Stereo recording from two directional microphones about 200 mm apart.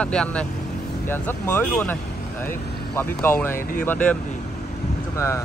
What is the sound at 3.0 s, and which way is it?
Speech, 10° left (ahead or behind).